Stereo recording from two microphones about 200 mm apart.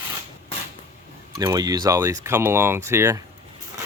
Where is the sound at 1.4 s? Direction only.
20° right (ahead or behind).